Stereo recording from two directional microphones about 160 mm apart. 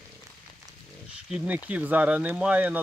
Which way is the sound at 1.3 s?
10° right (ahead or behind).